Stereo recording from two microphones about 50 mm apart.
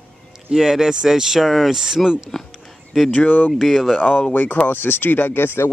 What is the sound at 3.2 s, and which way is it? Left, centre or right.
Speech, left.